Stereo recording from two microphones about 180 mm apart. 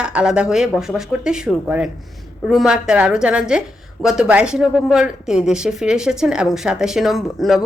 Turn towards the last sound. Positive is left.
turn(degrees=0)  # may be behind; listen again after turning